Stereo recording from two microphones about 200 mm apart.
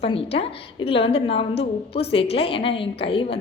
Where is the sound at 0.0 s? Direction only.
30° left (ahead or behind).